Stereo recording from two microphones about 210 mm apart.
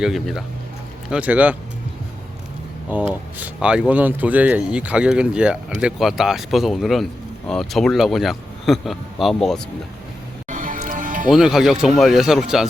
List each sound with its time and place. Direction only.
0.0 s speech: centre (ahead or behind)
2.9 s speech: 10° right (ahead or behind)
10.5 s music: 40° right (ahead or behind)
11.3 s speech: centre (ahead or behind)